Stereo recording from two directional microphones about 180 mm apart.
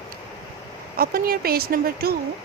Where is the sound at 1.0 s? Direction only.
55° right (ahead or behind).